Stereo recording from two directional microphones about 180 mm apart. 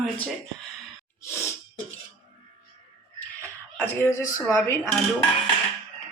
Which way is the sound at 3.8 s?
15° left (ahead or behind).